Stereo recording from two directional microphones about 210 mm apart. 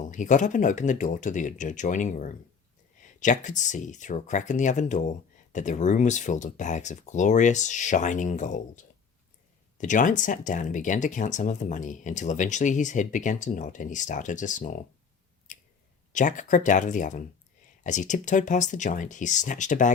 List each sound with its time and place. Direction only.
0.1 s speech: 35° left (ahead or behind)
15.5 s chewing: 40° left (ahead or behind)
16.1 s speech: 35° left (ahead or behind)